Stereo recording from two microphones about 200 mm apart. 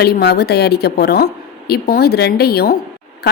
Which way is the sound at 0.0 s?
55° left (ahead or behind).